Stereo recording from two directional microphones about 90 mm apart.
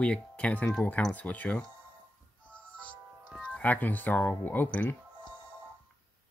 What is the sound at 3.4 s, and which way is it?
Speech, 15° left (ahead or behind).